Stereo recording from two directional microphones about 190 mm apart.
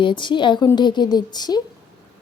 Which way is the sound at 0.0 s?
25° left (ahead or behind).